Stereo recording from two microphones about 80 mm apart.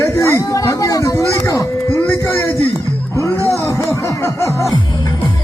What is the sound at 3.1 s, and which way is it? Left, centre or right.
Music, left.